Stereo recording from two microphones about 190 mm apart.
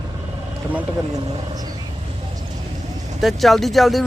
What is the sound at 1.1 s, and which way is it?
Speech, 20° right (ahead or behind).